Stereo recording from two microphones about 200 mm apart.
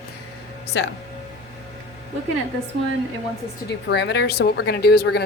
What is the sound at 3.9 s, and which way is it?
A woman's voice, 55° left (ahead or behind).